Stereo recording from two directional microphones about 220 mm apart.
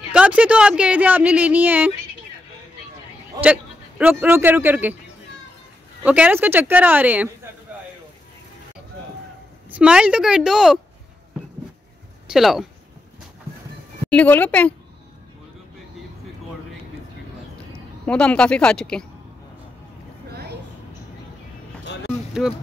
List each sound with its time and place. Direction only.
0.1 s speech: 5° right (ahead or behind)
4.0 s speech: 10° right (ahead or behind)
6.0 s speech: 5° right (ahead or behind)
9.7 s a woman's voice: 5° right (ahead or behind)
12.3 s speech: centre (ahead or behind)
14.1 s speech: 5° left (ahead or behind)
18.0 s a woman's voice: 5° left (ahead or behind)
20.2 s a sound: 45° right (ahead or behind)
22.4 s a woman's voice: centre (ahead or behind)